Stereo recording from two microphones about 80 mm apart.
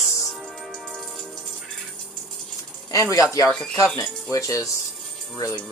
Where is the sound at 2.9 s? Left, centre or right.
Left.